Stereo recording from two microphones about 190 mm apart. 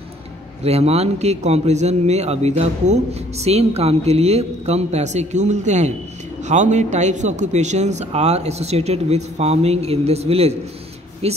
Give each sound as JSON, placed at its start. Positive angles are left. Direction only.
{"t": 0.7, "sound": "a man's voice", "side_deg": -35}